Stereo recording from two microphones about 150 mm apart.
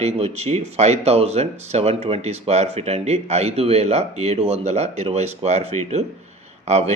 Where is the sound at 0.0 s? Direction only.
45° right (ahead or behind).